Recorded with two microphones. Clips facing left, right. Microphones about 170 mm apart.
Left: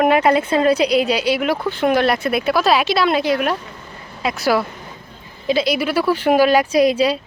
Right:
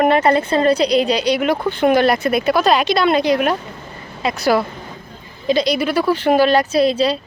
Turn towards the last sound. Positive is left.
turn(degrees=10)  # may be behind; listen again after turning